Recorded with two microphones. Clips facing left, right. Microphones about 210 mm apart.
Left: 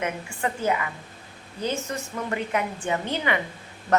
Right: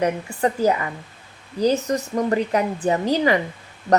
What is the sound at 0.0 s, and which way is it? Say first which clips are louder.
Speech: right 7 dB; 35° right (ahead or behind).